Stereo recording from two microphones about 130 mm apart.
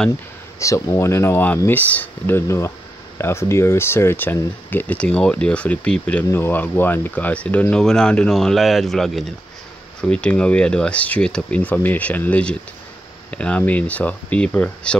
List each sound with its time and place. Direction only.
0.6 s speech: 25° left (ahead or behind)